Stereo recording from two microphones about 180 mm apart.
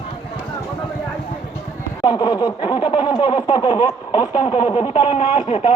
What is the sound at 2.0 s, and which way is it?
Snicker, 20° left (ahead or behind).